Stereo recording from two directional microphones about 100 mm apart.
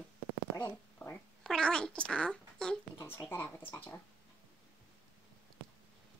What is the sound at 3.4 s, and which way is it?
Speech, 15° left (ahead or behind).